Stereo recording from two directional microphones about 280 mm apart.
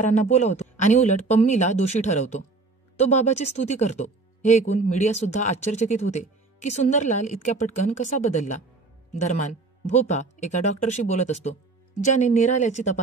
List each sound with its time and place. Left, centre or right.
0.0 s speech: left
9.8 s speech: left